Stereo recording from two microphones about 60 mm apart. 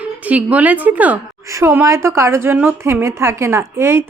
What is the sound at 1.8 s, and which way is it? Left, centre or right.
A woman's voice, right.